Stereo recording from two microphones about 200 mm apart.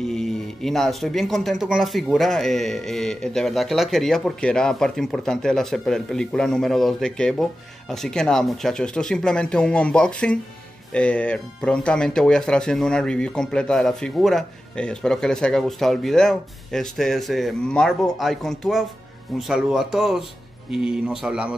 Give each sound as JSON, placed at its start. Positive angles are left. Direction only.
{"t": 0.0, "sound": "speech", "side_deg": 0}